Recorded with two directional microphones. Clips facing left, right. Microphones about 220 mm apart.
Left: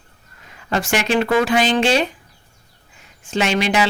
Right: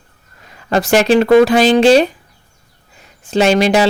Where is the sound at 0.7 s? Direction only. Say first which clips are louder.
Right 8 dB; 40° right (ahead or behind).